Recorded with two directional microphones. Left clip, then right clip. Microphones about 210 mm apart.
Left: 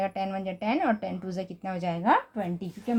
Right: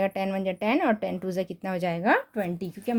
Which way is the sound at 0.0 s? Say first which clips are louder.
Right 3 dB; 50° right (ahead or behind).